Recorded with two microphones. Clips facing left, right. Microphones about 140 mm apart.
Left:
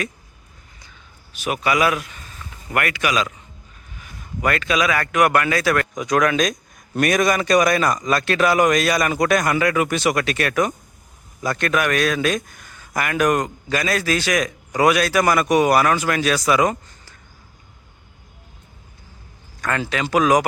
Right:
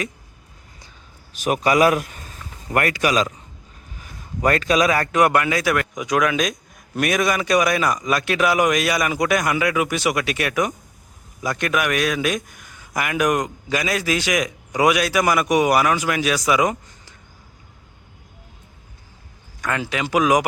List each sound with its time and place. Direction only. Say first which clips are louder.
1.3 s a man's voice: right 3 dB; 40° right (ahead or behind); by 17.2 s 15° right (ahead or behind)
19.6 s a man's voice: left 1 dB; 10° right (ahead or behind)